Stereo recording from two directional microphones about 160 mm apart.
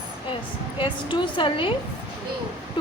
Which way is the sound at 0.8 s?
30° left (ahead or behind).